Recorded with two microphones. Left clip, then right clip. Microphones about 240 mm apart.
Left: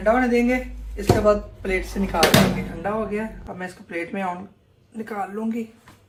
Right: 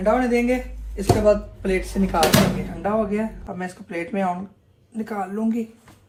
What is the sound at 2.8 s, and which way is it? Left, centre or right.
Speech, right.